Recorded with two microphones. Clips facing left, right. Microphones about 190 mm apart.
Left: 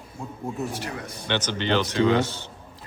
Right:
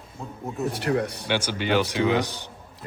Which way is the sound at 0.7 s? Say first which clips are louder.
Right 8 dB; 60° right (ahead or behind).